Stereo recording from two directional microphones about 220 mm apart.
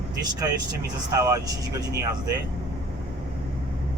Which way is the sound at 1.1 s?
15° right (ahead or behind).